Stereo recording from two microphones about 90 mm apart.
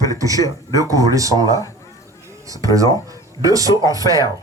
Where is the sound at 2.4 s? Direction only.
40° right (ahead or behind).